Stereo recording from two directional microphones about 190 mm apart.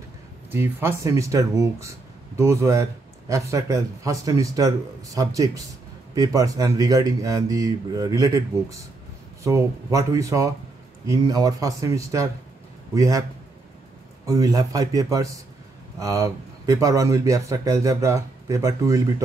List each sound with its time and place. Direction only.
0.5 s speech: 10° right (ahead or behind)
14.2 s speech: 15° right (ahead or behind)